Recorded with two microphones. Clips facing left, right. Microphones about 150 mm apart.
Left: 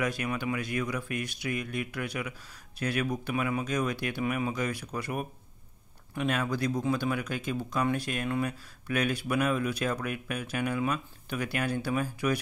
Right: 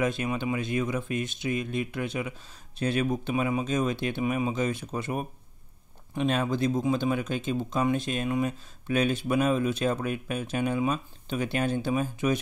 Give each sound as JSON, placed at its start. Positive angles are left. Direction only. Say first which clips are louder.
{"t": 0.0, "sound": "speech", "louder": "right 3 dB", "side_deg": -25}